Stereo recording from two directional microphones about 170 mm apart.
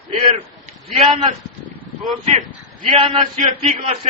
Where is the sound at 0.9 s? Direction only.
30° right (ahead or behind).